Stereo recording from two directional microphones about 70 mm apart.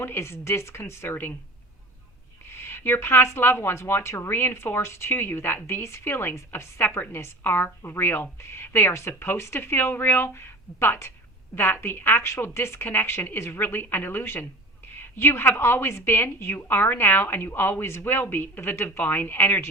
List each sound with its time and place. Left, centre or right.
0.0 s a woman's voice: left
2.5 s a woman's voice: left